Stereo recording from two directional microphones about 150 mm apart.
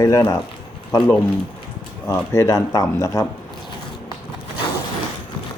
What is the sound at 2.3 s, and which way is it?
Speech, 20° left (ahead or behind).